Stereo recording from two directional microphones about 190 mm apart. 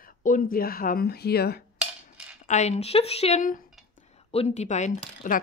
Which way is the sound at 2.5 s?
35° left (ahead or behind).